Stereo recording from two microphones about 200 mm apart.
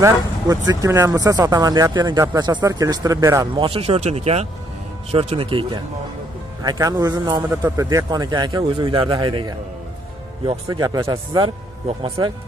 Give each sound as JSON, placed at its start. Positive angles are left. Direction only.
{"t": 0.0, "sound": "speech", "side_deg": -15}
{"t": 10.7, "sound": "speech", "side_deg": -15}